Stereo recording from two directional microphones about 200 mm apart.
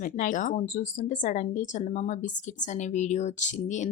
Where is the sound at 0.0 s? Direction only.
40° left (ahead or behind).